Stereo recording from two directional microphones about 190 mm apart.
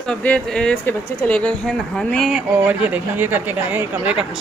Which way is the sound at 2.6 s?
10° right (ahead or behind).